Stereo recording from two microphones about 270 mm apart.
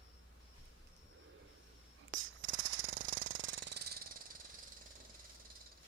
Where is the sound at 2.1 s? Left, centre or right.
Right.